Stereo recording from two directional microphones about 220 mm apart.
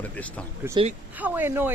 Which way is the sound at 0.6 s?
10° right (ahead or behind).